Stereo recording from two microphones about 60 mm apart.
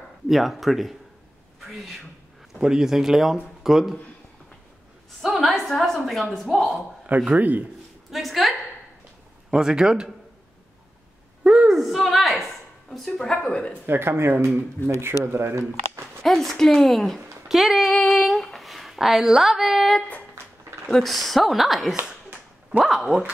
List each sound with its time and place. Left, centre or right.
0.3 s a woman's voice: centre
2.6 s a woman's voice: centre
5.2 s a woman's voice: centre
7.3 s a man's voice: right
8.1 s a woman's voice: centre
9.5 s speech: centre
11.7 s a sound: centre
12.9 s a woman's voice: centre
13.4 s speech: centre
13.8 s speech: right
16.2 s a woman's voice: centre
17.9 s female singing: centre
18.2 s a sound: centre
20.9 s a woman's voice: centre